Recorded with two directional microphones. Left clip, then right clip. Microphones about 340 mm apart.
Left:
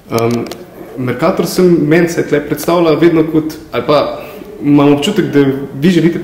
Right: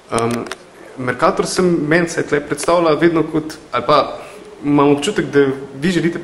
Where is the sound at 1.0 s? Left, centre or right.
Centre.